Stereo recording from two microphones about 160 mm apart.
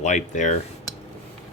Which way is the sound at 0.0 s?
50° left (ahead or behind).